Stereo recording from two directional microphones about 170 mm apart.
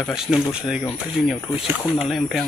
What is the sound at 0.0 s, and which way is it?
Speech, 5° right (ahead or behind).